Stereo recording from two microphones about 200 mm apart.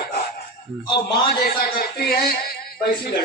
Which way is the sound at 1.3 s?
50° left (ahead or behind).